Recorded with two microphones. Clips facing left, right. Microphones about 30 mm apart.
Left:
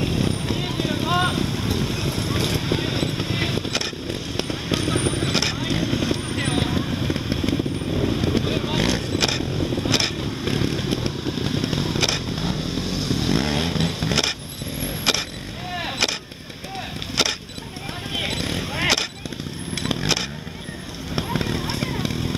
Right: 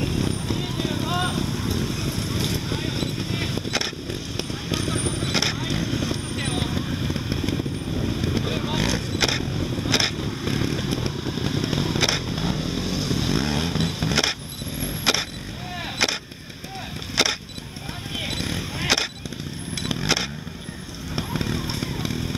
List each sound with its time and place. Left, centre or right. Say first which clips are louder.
0.0 s vehicle: left 2 dB; left
9.8 s vehicle: right 1 dB; centre
10.1 s motorcycle: left 2 dB; centre
12.3 s vehicle: even; centre
14.8 s a sound: left 1 dB; centre
15.7 s gunshot: left 1 dB; centre
17.2 s a sound: right 1 dB; centre
19.7 s vehicle: left 3 dB; centre
21.1 s a sound: left 2 dB; centre